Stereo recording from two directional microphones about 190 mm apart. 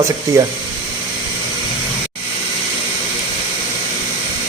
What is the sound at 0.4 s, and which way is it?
Speech, 15° right (ahead or behind).